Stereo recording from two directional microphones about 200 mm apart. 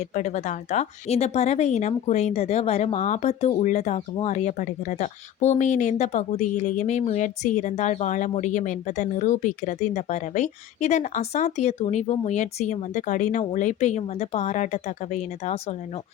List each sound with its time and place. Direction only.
0.1 s speech: 35° left (ahead or behind)